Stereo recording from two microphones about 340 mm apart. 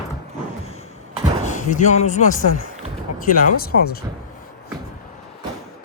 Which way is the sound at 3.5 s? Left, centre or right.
Left.